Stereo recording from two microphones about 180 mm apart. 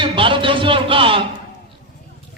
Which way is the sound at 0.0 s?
30° right (ahead or behind).